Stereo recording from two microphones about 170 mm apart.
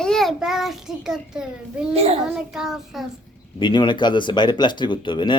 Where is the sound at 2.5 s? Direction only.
5° right (ahead or behind).